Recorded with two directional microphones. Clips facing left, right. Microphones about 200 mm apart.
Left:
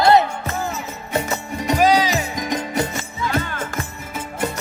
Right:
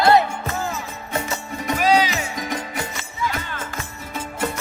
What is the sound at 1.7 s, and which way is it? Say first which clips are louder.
Music: left 2 dB; 40° left (ahead or behind).